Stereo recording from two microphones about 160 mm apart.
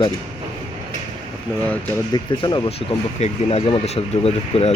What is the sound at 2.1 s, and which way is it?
Speech, 25° left (ahead or behind).